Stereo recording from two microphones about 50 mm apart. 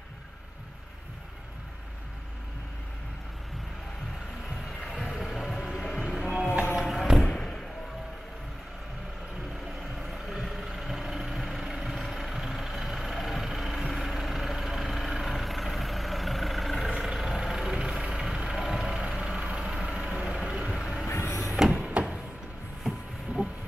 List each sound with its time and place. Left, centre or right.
4.8 s music: centre
7.2 s basketball bounce: centre
9.9 s vehicle: centre
16.9 s vehicle: centre
21.1 s vehicle: left
21.5 s a sound: centre
22.8 s a sound: centre